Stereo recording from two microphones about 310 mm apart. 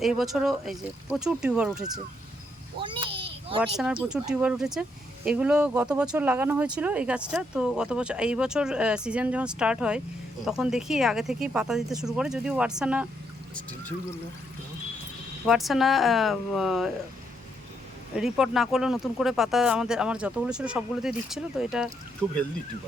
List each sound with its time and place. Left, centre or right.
0.0 s speech: centre
2.8 s a sound: centre
4.1 s speech: centre
15.4 s speech: centre
18.1 s speech: centre